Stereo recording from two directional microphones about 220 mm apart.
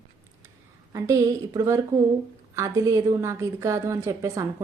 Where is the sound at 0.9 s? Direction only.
15° right (ahead or behind).